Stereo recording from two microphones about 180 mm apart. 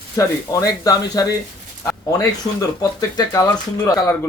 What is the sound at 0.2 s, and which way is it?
Speech, 20° left (ahead or behind).